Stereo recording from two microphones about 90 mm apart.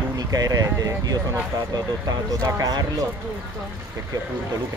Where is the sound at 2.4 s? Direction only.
40° right (ahead or behind).